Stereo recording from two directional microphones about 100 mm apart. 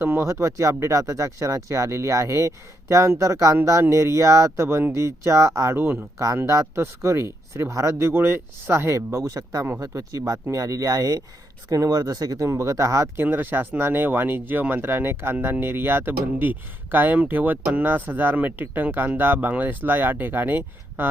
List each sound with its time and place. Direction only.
0.0 s speech: 25° right (ahead or behind)
13.2 s speech: 20° right (ahead or behind)